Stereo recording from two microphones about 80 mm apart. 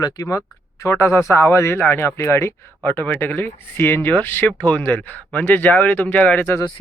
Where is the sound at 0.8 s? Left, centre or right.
Left.